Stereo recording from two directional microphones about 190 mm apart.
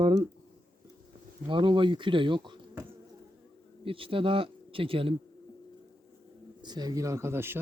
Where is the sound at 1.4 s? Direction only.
25° right (ahead or behind).